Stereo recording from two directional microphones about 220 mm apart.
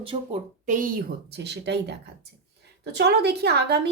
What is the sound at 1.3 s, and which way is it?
Speech, 50° right (ahead or behind).